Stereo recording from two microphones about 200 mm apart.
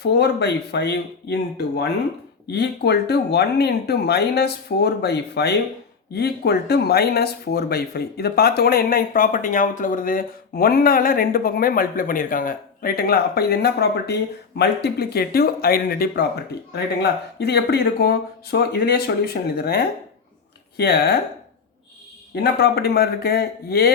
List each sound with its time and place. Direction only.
0.0 s speech: 55° left (ahead or behind)
22.4 s speech: 55° left (ahead or behind)